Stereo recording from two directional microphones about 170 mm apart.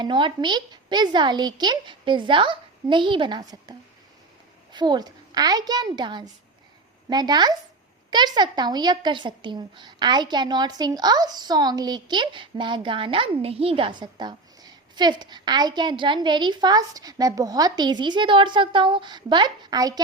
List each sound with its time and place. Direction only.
0.0 s a woman's voice: 30° right (ahead or behind)